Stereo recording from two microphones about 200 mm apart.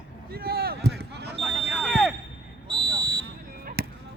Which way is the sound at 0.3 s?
50° right (ahead or behind).